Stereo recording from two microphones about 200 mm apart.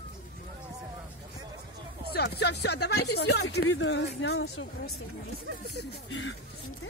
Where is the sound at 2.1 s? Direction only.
55° left (ahead or behind); by 4.9 s 70° left (ahead or behind).